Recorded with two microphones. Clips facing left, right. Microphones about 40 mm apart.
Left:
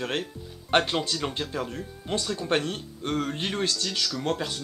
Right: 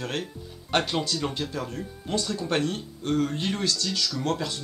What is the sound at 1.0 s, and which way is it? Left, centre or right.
Speech, centre.